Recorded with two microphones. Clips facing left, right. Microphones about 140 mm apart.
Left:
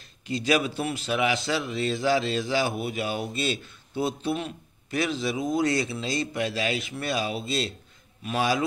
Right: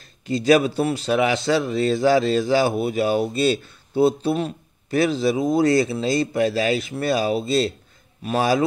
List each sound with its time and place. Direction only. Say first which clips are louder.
0.3 s speech: right 8 dB; 35° right (ahead or behind)